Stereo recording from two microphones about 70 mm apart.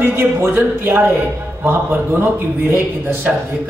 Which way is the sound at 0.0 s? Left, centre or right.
Right.